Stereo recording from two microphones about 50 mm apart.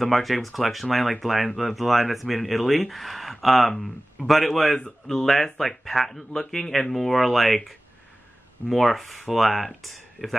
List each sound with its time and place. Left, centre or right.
0.0 s speech: centre
4.7 s speech: centre
5.1 s speech: centre